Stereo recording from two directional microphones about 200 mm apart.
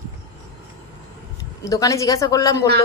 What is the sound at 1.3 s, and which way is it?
Speech, 15° left (ahead or behind).